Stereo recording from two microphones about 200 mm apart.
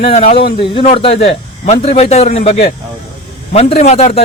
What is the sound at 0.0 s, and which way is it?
A man's voice, 35° left (ahead or behind).